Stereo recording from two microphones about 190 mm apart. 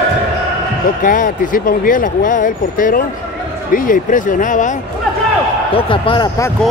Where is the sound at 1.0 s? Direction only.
45° left (ahead or behind).